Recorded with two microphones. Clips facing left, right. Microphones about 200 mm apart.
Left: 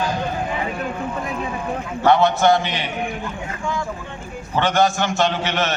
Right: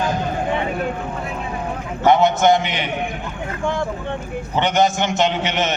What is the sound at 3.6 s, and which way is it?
Vehicle, 55° right (ahead or behind).